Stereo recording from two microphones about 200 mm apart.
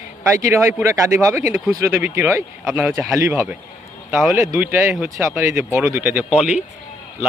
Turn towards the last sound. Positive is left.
turn(degrees=-5)  # may be behind; listen again after turning